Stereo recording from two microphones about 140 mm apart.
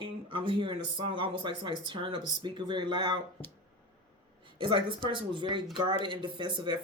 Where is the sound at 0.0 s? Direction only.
40° right (ahead or behind).